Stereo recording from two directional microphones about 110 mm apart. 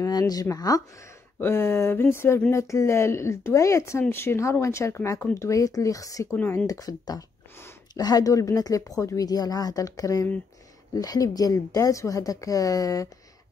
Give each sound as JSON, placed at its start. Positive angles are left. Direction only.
{"t": 0.0, "sound": "a woman's voice", "side_deg": 35}
{"t": 1.4, "sound": "a woman's voice", "side_deg": 25}